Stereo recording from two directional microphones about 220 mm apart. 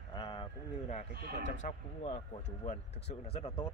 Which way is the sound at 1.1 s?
45° right (ahead or behind).